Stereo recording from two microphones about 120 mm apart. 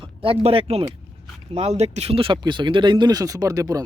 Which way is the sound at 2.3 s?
40° right (ahead or behind).